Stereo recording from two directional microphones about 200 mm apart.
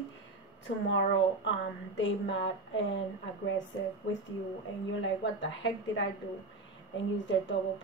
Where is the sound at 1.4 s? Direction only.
70° left (ahead or behind).